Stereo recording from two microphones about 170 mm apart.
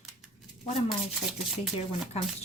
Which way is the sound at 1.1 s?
5° right (ahead or behind).